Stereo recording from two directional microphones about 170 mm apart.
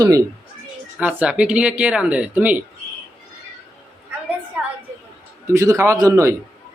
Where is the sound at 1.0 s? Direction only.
10° right (ahead or behind).